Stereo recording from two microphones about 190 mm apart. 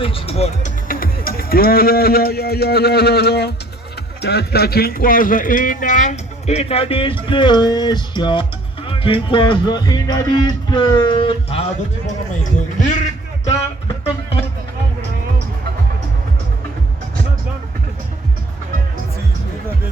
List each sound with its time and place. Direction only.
0.0 s a man's voice: 30° left (ahead or behind)
0.9 s a man's voice: 50° left (ahead or behind); by 11.6 s 30° left (ahead or behind)
12.0 s a man's voice: 40° left (ahead or behind)